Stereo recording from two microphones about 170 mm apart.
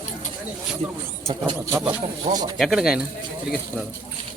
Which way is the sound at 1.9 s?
20° right (ahead or behind).